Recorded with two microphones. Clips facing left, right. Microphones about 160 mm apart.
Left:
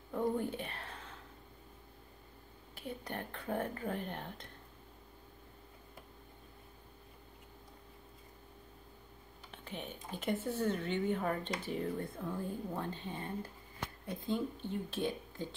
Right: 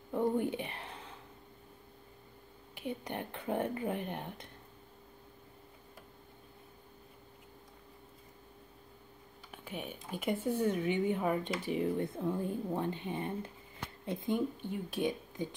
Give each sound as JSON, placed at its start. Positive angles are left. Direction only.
{"t": 0.1, "sound": "a sound", "side_deg": -15}
{"t": 2.7, "sound": "speech", "side_deg": -15}
{"t": 9.5, "sound": "speech", "side_deg": -10}